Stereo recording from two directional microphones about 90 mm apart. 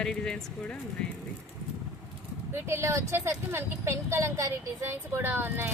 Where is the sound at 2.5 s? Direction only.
30° right (ahead or behind).